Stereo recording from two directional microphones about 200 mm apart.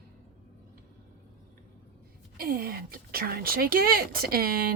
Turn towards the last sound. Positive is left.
turn(degrees=-50)  # may be behind; listen again after turning